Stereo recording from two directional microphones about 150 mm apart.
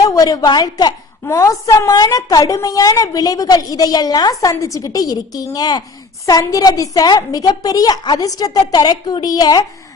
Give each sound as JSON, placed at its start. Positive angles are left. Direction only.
{"t": 0.1, "sound": "a woman's voice", "side_deg": 25}